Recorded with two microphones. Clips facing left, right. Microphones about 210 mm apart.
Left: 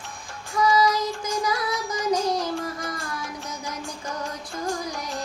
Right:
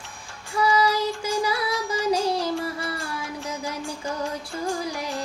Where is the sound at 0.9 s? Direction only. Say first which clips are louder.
Right 1 dB; 10° right (ahead or behind).